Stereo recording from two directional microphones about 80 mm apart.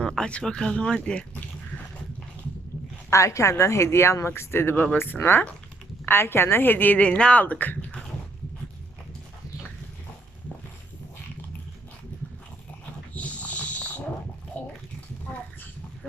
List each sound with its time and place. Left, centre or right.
0.0 s speech: centre
3.1 s a woman's voice: left
13.1 s a sound: centre